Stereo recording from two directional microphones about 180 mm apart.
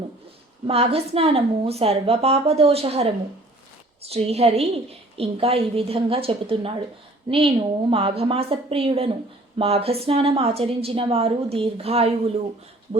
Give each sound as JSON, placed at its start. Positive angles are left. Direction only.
{"t": 0.7, "sound": "a woman's voice", "side_deg": -35}
{"t": 4.1, "sound": "a woman's voice", "side_deg": -35}